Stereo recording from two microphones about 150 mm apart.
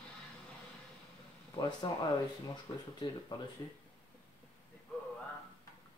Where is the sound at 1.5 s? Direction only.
30° left (ahead or behind).